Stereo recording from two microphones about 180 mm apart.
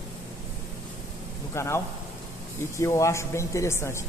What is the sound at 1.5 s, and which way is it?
Speech, 15° left (ahead or behind).